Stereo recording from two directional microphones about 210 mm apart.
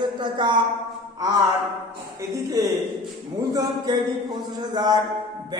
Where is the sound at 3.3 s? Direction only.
15° right (ahead or behind).